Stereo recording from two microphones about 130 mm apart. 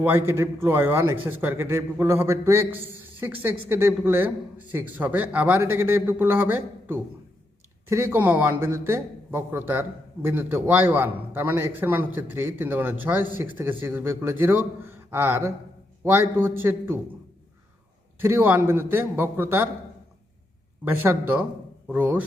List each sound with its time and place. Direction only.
0.0 s a man's voice: 20° right (ahead or behind)
18.2 s a man's voice: 20° right (ahead or behind)
20.8 s a man's voice: 15° right (ahead or behind)